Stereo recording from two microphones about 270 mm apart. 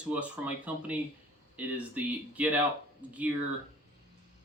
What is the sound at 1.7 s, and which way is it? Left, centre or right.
Speech, centre.